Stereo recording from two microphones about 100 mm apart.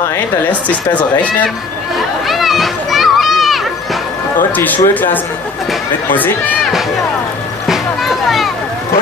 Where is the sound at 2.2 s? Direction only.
Centre (ahead or behind).